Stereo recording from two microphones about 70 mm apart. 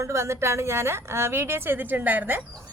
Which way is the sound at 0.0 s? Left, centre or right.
Right.